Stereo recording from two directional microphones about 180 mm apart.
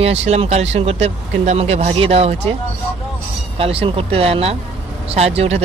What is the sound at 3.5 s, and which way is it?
Speech, 30° right (ahead or behind).